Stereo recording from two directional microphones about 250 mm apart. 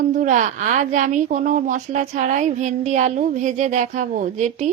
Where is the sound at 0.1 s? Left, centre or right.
Right.